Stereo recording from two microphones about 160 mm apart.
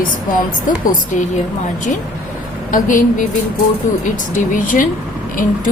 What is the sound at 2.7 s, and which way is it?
Speech, 55° left (ahead or behind).